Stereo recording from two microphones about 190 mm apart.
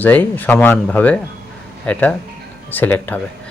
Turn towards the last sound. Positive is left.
turn(degrees=10)  # may be behind; listen again after turning